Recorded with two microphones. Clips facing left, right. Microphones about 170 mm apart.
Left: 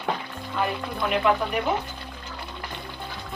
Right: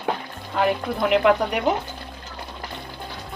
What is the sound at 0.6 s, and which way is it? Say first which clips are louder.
Speech: right 6 dB; 75° right (ahead or behind).